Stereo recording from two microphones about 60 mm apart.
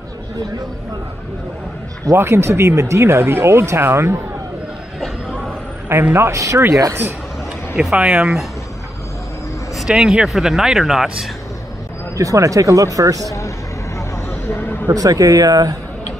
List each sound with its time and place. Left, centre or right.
2.1 s speech: right
6.1 s speech: right
7.9 s speech: centre
9.8 s speech: centre
12.2 s speech: right
13.9 s a sound: left
14.9 s speech: right